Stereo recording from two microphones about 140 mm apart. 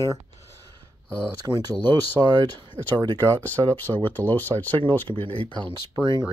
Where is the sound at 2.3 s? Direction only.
30° right (ahead or behind).